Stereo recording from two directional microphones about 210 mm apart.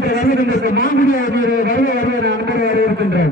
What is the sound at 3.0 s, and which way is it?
Speech, 50° right (ahead or behind).